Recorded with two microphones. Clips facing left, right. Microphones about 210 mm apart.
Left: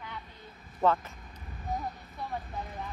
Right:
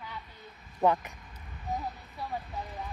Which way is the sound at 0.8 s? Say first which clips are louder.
Right 1 dB; 15° right (ahead or behind).